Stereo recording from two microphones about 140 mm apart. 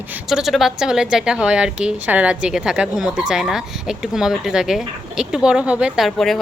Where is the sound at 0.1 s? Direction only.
5° right (ahead or behind).